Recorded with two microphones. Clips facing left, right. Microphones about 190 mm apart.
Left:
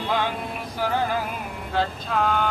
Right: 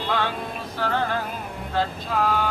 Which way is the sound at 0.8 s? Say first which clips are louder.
Left 1 dB; 10° left (ahead or behind).